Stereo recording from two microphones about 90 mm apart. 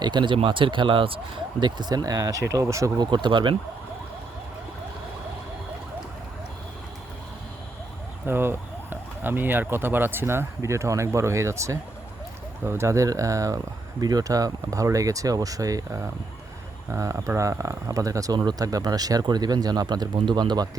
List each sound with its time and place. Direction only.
0.0 s speech: 60° right (ahead or behind); by 2.9 s 35° right (ahead or behind)
3.0 s speech: 60° right (ahead or behind)
8.3 s speech: 25° right (ahead or behind); by 20.1 s 50° right (ahead or behind)
20.1 s speech: 60° right (ahead or behind)